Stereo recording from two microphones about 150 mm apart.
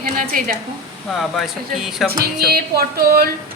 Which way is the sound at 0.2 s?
65° right (ahead or behind).